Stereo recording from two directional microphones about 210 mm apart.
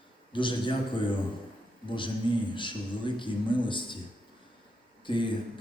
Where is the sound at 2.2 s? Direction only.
25° left (ahead or behind).